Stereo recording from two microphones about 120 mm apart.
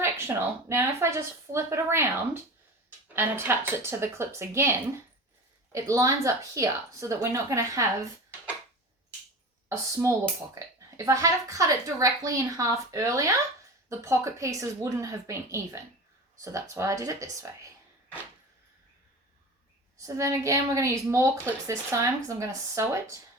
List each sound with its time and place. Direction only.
0.0 s a woman's voice: 20° right (ahead or behind)
9.6 s a woman's voice: 25° right (ahead or behind)
20.0 s a woman's voice: 25° right (ahead or behind)